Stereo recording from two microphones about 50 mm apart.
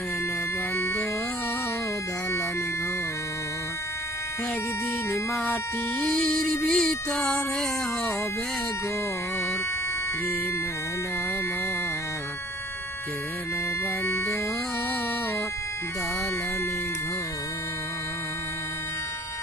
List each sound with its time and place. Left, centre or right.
0.8 s music: left
6.0 s music: centre
14.0 s music: left